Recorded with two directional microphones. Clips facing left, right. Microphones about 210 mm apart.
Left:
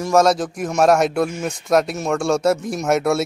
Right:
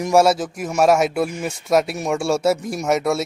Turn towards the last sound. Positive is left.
turn(degrees=0)  # may be behind; listen again after turning